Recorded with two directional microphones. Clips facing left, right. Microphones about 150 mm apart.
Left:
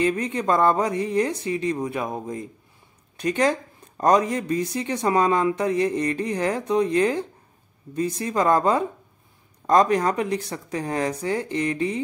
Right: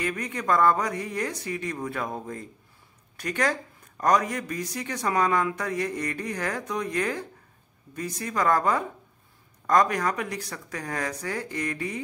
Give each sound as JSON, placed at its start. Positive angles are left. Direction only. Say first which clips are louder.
{"t": 0.0, "sound": "speech", "louder": "left 7 dB", "side_deg": 25}